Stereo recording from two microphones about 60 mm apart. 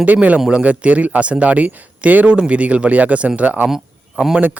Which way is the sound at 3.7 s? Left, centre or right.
Centre.